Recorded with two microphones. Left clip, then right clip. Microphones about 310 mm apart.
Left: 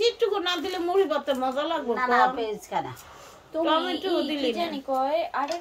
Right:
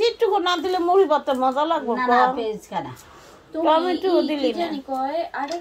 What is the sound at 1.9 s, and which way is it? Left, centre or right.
Speech, centre.